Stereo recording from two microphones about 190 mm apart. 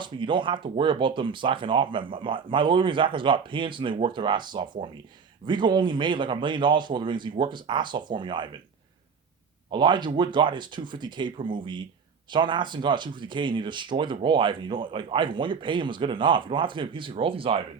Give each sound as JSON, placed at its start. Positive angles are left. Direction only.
{"t": 0.0, "sound": "speech", "side_deg": -25}
{"t": 9.7, "sound": "speech", "side_deg": -25}